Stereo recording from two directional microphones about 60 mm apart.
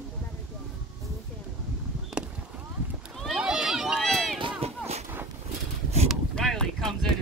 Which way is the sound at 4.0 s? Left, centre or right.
Centre.